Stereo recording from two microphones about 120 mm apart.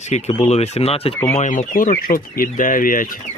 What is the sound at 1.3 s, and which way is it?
Speech, 80° left.